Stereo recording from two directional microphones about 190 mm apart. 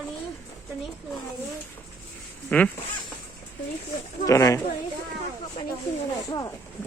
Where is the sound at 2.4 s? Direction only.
5° left (ahead or behind).